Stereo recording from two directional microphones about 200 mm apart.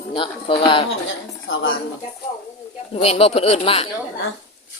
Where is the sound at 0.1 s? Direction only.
25° left (ahead or behind).